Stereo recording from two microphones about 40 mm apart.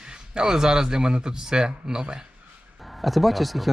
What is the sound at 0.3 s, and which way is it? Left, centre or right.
Speech, centre.